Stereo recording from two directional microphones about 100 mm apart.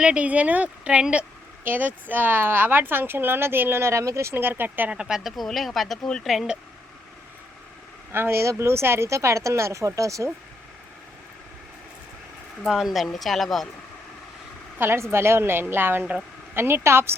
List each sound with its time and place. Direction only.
0.0 s speech: 10° right (ahead or behind); by 6.3 s 10° left (ahead or behind)
6.3 s speech: centre (ahead or behind)
8.1 s speech: 25° right (ahead or behind)
12.6 s speech: centre (ahead or behind)
14.8 s speech: 25° right (ahead or behind)